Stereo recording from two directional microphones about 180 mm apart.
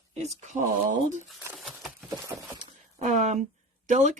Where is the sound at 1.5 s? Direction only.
Centre (ahead or behind).